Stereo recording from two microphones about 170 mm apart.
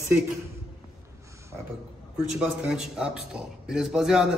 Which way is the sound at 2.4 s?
5° right (ahead or behind).